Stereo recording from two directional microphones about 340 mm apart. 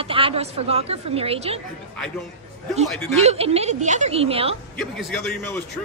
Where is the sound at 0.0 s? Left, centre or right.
Centre.